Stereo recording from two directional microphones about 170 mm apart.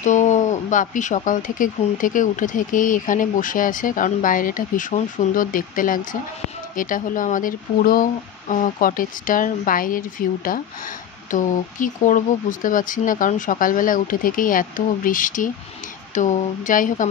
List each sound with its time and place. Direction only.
0.0 s speech: 45° left (ahead or behind)